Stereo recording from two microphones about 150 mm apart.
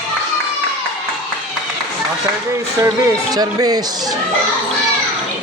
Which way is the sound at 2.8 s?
25° right (ahead or behind).